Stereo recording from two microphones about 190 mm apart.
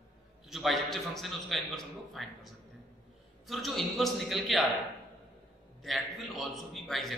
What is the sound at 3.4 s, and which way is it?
A man's voice, centre (ahead or behind).